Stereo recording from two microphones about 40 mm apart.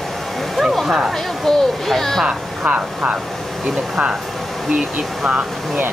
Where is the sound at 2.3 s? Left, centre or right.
Right.